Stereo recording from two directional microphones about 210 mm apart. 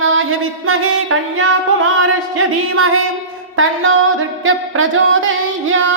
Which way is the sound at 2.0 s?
85° right.